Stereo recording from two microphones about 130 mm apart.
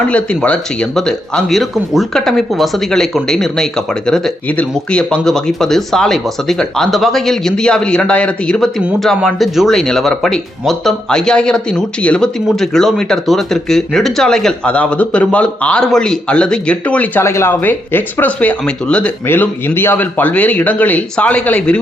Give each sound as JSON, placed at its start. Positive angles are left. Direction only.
{"t": 0.1, "sound": "speech", "side_deg": 10}